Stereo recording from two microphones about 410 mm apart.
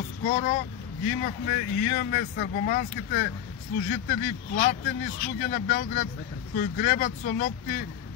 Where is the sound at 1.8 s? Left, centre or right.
Left.